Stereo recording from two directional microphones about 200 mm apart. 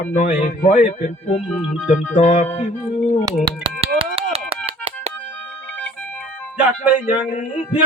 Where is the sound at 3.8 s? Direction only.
30° right (ahead or behind).